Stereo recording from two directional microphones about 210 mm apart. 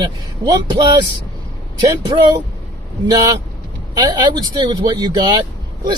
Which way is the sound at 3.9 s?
20° right (ahead or behind).